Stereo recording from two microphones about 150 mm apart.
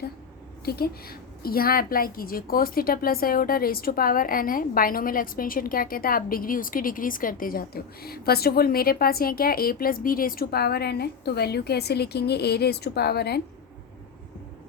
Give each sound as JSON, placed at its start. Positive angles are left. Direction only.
{"t": 0.6, "sound": "a woman's voice", "side_deg": 90}